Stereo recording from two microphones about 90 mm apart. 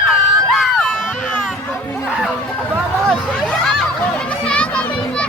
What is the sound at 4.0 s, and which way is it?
Children playing, 10° left (ahead or behind).